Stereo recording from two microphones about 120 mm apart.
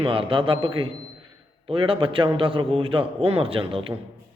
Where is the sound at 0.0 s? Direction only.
45° right (ahead or behind).